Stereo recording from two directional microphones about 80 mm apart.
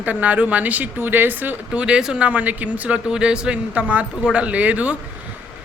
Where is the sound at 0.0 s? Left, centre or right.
Centre.